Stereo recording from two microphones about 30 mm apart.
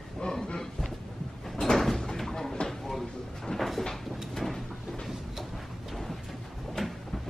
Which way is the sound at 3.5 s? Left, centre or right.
Left.